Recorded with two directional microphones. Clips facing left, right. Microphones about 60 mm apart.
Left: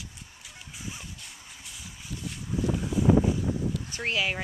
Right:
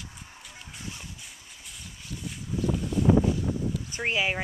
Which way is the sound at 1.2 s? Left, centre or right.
Centre.